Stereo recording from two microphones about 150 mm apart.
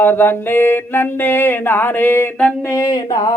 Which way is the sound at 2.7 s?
20° left (ahead or behind).